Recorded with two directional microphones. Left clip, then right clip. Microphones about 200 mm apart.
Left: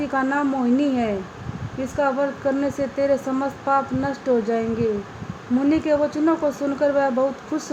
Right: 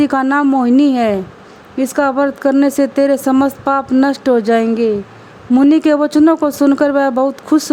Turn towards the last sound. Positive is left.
turn(degrees=-55)  # may be behind; listen again after turning